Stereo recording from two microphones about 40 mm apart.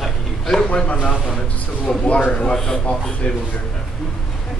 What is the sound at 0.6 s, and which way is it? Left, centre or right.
A man's voice, left.